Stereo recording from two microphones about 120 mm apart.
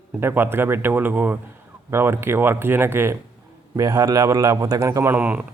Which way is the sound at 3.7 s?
30° right (ahead or behind).